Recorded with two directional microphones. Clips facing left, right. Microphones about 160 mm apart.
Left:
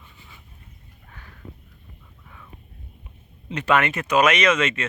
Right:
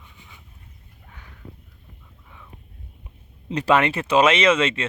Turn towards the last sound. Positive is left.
turn(degrees=-30)  # may be behind; listen again after turning